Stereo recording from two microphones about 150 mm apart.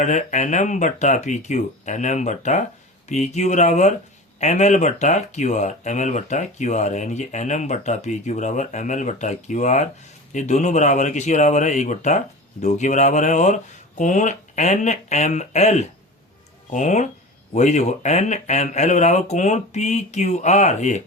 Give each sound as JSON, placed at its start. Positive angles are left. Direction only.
{"t": 0.0, "sound": "speech", "side_deg": 55}